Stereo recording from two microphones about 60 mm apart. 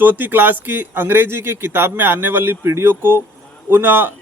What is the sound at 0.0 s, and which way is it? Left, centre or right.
Speech, right.